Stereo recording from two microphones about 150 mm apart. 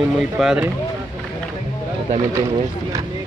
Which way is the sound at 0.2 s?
5° right (ahead or behind).